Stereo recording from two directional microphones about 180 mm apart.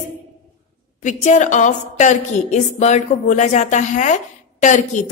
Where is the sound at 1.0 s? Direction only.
40° left (ahead or behind).